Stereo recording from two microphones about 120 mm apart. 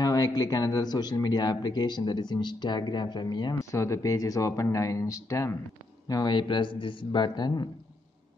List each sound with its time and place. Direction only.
0.0 s speech: 35° left (ahead or behind)
3.7 s speech: 25° left (ahead or behind)